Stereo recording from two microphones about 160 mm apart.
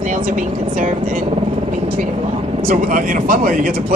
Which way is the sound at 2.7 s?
60° right (ahead or behind).